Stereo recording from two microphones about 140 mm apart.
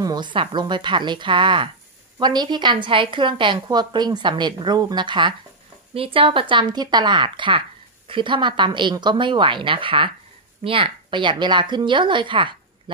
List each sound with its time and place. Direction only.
0.0 s a woman's voice: 30° right (ahead or behind)